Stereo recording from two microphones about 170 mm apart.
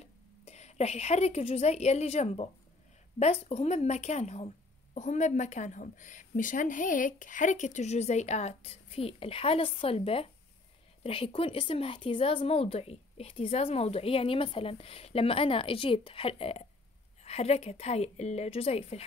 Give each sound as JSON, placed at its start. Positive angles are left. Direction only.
{"t": 0.0, "sound": "a woman's voice", "side_deg": 40}